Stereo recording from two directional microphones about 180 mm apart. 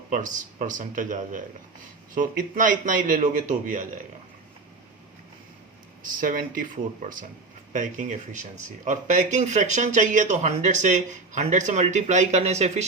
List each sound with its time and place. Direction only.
0.1 s a man's voice: 45° right (ahead or behind)
6.0 s a man's voice: 50° right (ahead or behind)